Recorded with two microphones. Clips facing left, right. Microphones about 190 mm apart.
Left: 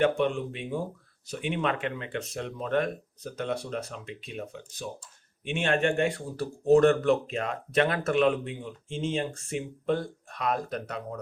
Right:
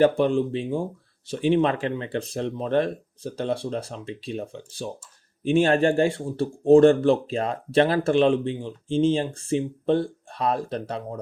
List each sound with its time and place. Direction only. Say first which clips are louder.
0.0 s speech: right 6 dB; 35° right (ahead or behind)